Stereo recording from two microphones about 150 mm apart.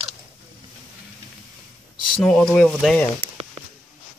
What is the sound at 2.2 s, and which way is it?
Speech, 5° left (ahead or behind).